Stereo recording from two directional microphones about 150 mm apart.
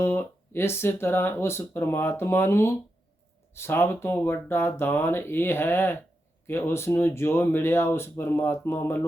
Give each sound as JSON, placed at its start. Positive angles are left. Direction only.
{"t": 0.0, "sound": "speech", "side_deg": 15}